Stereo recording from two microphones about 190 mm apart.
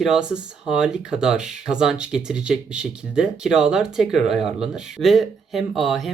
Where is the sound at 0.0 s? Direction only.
5° right (ahead or behind).